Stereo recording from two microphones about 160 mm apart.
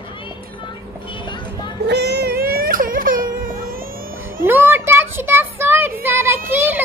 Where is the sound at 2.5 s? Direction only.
60° right (ahead or behind).